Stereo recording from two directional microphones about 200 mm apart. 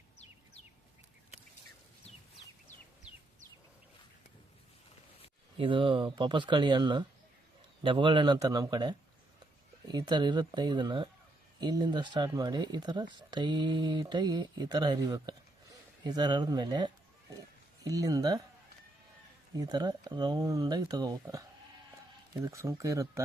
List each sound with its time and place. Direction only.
5.5 s speech: 25° right (ahead or behind)
19.5 s speech: 20° right (ahead or behind)